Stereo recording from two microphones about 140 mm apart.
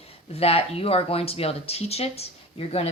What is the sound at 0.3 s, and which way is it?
Speech, 45° left (ahead or behind).